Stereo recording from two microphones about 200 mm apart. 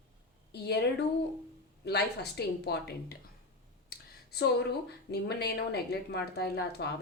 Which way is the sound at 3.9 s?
55° left (ahead or behind).